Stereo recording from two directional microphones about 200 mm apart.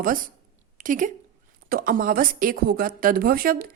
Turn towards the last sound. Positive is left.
turn(degrees=-50)  # may be behind; listen again after turning